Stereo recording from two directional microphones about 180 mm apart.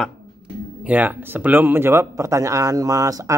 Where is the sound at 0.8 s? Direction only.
10° right (ahead or behind).